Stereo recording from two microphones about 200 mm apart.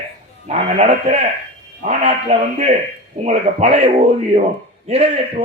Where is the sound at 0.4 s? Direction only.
35° right (ahead or behind).